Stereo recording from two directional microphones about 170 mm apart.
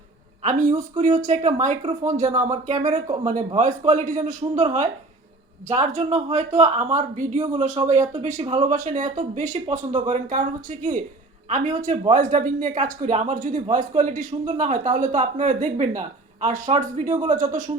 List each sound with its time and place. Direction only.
0.4 s speech: 45° right (ahead or behind)